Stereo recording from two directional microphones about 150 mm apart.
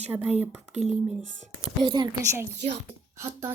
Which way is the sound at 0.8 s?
50° right (ahead or behind).